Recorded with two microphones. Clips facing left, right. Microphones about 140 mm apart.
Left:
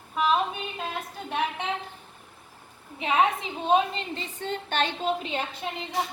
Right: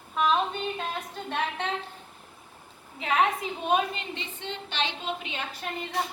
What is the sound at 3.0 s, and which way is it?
A woman's voice, 25° left (ahead or behind).